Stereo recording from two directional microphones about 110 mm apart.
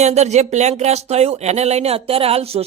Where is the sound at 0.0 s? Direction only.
90° right.